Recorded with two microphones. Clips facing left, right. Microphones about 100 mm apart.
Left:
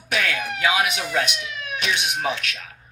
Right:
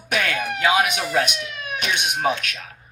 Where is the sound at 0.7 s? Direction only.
25° right (ahead or behind).